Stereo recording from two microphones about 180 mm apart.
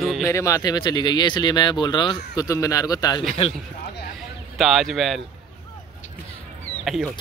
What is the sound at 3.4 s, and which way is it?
Speech, 35° left (ahead or behind).